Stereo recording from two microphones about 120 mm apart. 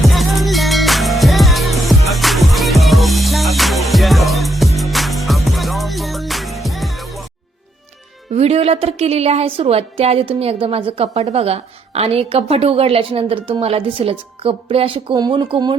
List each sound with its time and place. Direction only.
0.0 s music: centre (ahead or behind)
8.4 s a woman's voice: 60° right (ahead or behind)
15.1 s speech: 35° right (ahead or behind)